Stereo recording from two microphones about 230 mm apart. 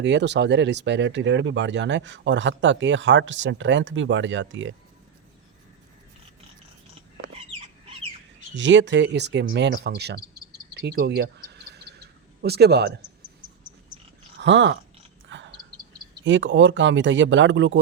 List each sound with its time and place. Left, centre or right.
0.0 s speech: right
8.5 s speech: right
10.8 s cricket: right
12.4 s speech: right
14.4 s speech: right
15.3 s a sound: right
16.2 s speech: right